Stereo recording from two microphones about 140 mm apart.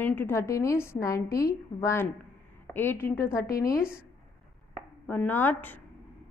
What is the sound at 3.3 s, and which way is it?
Speech, 90° left.